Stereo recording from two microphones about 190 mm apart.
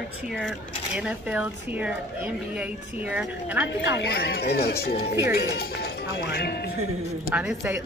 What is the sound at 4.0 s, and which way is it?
Speech, 60° left (ahead or behind).